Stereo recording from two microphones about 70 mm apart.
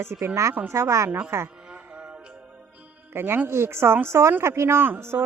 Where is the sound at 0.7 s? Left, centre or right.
Right.